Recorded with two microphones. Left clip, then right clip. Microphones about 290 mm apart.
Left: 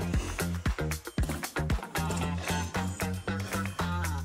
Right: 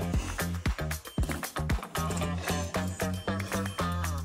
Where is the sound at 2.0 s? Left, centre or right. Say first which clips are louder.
Right 1 dB; centre.